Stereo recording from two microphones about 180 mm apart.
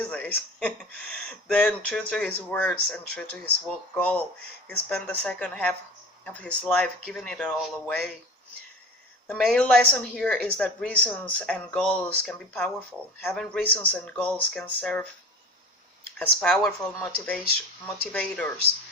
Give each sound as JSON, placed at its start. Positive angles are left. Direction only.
{"t": 0.0, "sound": "speech", "side_deg": 5}
{"t": 9.2, "sound": "speech", "side_deg": 5}
{"t": 16.1, "sound": "speech", "side_deg": 5}